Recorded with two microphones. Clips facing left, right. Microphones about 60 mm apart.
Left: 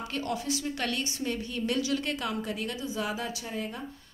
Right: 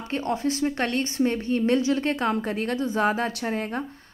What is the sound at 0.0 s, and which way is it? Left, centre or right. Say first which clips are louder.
A woman's voice: right 6 dB; right.